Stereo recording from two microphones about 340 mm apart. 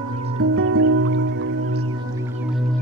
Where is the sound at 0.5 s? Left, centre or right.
Right.